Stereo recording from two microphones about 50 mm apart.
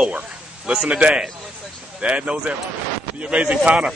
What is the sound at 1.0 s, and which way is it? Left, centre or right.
Speech, right.